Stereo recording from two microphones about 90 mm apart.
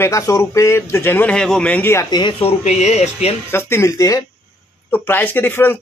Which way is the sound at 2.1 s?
60° left (ahead or behind).